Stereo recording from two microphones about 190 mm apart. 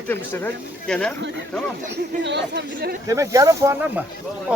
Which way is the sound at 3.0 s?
15° right (ahead or behind).